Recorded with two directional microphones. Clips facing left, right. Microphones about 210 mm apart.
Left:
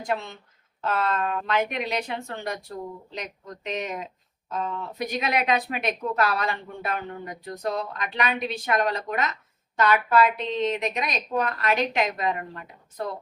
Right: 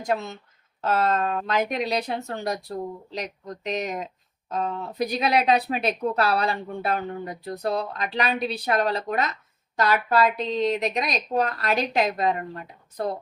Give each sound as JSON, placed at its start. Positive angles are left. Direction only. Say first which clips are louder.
{"t": 0.1, "sound": "speech", "louder": "right 3 dB", "side_deg": -40}